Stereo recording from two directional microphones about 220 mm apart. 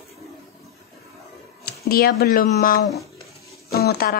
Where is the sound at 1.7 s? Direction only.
45° left (ahead or behind).